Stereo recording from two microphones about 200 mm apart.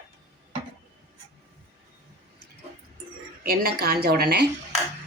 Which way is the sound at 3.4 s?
50° right (ahead or behind).